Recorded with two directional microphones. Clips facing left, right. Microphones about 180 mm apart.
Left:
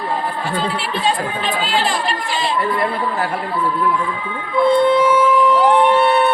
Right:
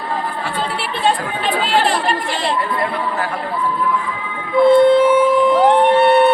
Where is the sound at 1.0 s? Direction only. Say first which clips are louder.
Right 3 dB; 65° right (ahead or behind).